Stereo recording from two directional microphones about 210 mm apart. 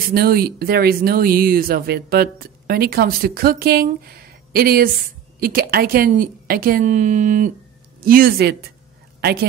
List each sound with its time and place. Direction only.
0.1 s a woman's voice: 50° right (ahead or behind)